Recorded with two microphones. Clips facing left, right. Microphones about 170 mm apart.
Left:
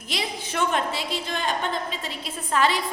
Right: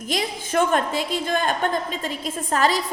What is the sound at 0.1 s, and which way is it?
A woman's voice, 45° right (ahead or behind).